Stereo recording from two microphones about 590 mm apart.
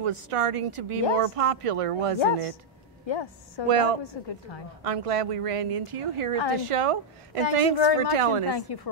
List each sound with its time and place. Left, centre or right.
0.0 s a woman's voice: right
3.1 s a woman's voice: left
3.6 s a woman's voice: right
8.7 s a woman's voice: left